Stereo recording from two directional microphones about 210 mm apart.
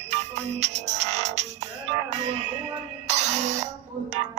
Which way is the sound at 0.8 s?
35° right (ahead or behind).